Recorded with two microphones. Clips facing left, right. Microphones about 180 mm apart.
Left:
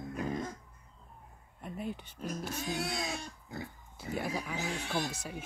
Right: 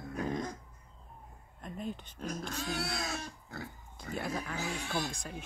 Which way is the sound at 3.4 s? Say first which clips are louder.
Left 1 dB; 15° left (ahead or behind).